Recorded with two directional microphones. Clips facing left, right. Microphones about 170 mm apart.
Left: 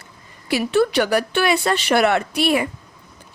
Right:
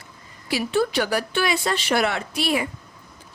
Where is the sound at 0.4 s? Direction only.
65° left (ahead or behind).